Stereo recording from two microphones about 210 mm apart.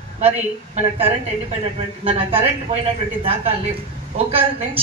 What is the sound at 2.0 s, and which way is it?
A man's voice, 25° right (ahead or behind).